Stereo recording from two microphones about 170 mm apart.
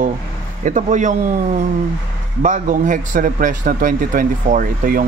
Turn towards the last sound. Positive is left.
turn(degrees=-55)  # may be behind; listen again after turning